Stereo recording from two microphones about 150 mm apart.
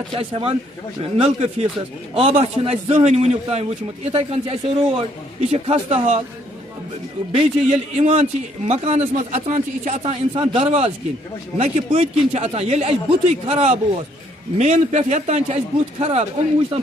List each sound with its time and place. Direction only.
0.1 s a man's voice: 40° right (ahead or behind)
7.3 s a man's voice: 45° right (ahead or behind)
10.3 s speech: 35° right (ahead or behind)
10.6 s a man's voice: 45° right (ahead or behind)